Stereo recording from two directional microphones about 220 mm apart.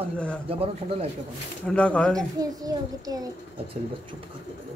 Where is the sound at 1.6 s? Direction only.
5° left (ahead or behind).